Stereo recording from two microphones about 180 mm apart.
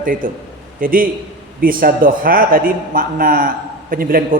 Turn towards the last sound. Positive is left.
turn(degrees=-55)  # may be behind; listen again after turning